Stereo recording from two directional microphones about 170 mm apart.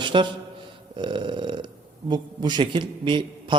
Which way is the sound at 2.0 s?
25° right (ahead or behind).